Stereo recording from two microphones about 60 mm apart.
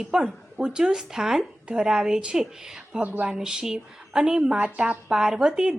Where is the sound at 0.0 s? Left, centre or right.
Centre.